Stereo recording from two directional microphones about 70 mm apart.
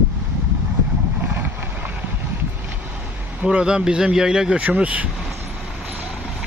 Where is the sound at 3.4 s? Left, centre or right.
Centre.